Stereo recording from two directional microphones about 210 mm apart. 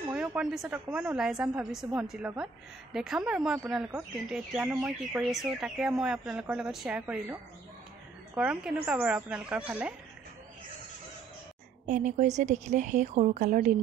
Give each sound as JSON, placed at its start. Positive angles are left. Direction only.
{"t": 0.1, "sound": "speech", "side_deg": -5}
{"t": 8.4, "sound": "speech", "side_deg": -5}
{"t": 11.8, "sound": "a woman's voice", "side_deg": -35}